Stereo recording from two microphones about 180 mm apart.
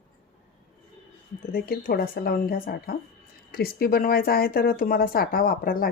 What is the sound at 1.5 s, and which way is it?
Speech, 55° left (ahead or behind).